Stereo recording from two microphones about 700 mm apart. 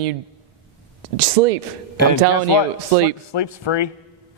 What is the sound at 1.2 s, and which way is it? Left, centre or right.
Speech, right.